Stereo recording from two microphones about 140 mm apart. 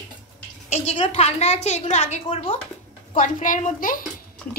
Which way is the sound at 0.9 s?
40° left (ahead or behind).